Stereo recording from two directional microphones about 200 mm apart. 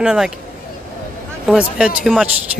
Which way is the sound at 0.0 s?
5° right (ahead or behind).